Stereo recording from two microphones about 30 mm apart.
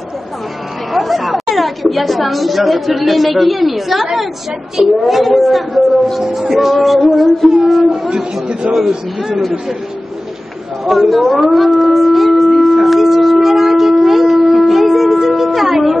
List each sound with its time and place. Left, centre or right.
0.9 s a woman's voice: centre
8.1 s speech: right
8.7 s a man's voice: centre
10.9 s speech: centre
12.6 s shofar: centre
14.7 s music: centre